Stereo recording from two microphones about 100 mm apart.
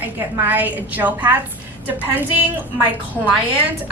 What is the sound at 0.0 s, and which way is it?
A woman's voice, 15° right (ahead or behind).